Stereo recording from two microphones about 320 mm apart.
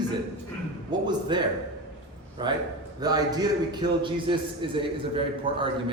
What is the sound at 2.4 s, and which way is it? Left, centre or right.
A man's voice, centre.